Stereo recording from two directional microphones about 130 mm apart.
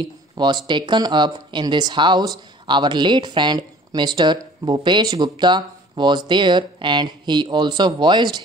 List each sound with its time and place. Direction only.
0.7 s speech: 35° right (ahead or behind)